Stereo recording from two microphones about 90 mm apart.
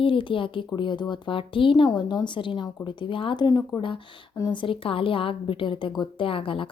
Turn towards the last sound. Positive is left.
turn(degrees=80)